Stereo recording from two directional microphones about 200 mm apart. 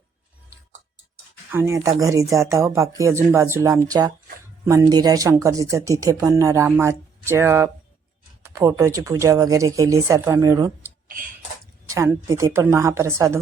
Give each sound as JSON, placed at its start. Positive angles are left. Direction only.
{"t": 1.5, "sound": "speech", "side_deg": -10}